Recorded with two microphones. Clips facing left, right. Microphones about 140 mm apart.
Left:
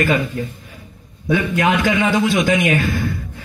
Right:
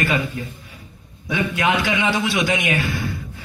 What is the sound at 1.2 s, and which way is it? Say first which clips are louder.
A man's voice: left 4 dB; 45° left (ahead or behind).